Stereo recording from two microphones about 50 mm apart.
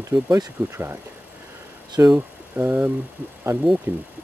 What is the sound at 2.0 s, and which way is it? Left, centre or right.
Speech, right.